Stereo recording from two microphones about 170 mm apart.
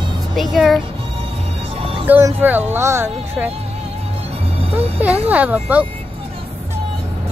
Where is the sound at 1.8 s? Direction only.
30° right (ahead or behind).